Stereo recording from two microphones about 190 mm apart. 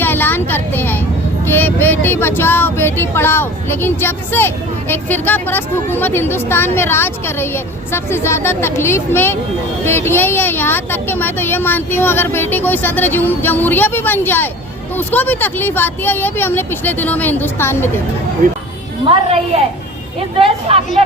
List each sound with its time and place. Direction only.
0.0 s vehicle: 10° left (ahead or behind)
1.5 s a sound: 10° left (ahead or behind)
18.4 s speech: 45° right (ahead or behind)
19.0 s a woman's voice: 30° right (ahead or behind)